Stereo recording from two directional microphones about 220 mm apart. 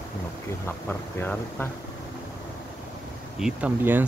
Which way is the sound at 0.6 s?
10° left (ahead or behind).